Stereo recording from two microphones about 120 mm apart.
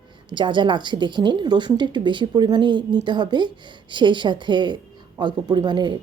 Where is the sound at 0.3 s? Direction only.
40° right (ahead or behind).